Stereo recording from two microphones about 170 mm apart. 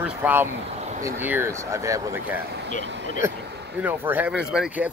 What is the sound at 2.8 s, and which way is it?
Vehicle, 90° right.